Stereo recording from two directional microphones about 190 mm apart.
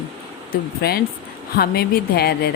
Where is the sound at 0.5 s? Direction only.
55° left (ahead or behind).